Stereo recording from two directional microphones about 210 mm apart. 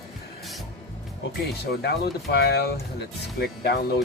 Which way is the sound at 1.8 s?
50° left (ahead or behind).